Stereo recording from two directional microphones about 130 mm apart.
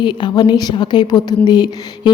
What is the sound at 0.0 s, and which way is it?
A woman's voice, 35° left (ahead or behind).